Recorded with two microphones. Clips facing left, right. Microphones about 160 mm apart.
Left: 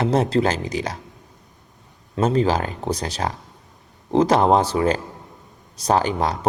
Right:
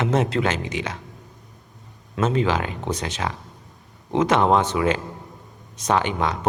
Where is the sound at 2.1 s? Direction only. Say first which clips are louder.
Left 2 dB; 35° left (ahead or behind).